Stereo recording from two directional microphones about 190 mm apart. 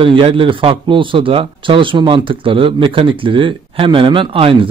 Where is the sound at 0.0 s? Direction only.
30° right (ahead or behind).